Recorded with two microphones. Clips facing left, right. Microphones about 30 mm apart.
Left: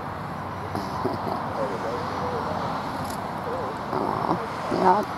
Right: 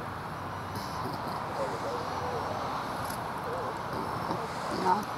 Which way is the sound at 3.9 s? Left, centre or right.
Left.